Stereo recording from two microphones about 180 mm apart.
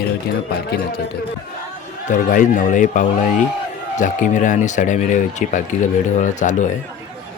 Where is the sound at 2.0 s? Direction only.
45° left (ahead or behind).